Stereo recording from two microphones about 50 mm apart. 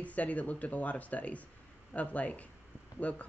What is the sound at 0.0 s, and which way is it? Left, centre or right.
Speech, left.